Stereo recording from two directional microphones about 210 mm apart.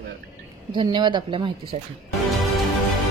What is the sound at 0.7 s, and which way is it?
Speech, 20° right (ahead or behind).